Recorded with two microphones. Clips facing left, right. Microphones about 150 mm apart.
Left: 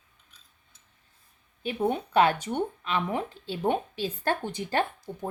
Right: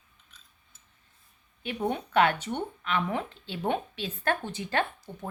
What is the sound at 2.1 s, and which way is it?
Speech, 30° left (ahead or behind).